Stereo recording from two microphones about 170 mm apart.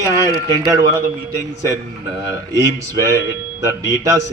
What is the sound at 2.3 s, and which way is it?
Speech, 20° right (ahead or behind).